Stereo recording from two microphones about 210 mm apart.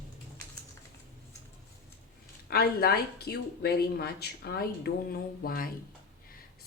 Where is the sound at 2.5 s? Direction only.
45° left (ahead or behind).